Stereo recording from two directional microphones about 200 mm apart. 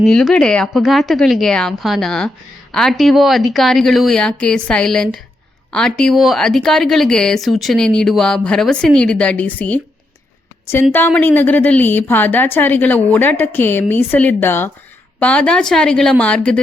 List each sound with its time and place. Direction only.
0.0 s speech: centre (ahead or behind)
10.9 s a woman's voice: 10° left (ahead or behind)